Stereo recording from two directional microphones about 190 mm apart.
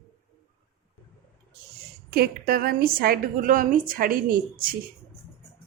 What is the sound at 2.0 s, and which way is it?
A woman's voice, 55° right (ahead or behind).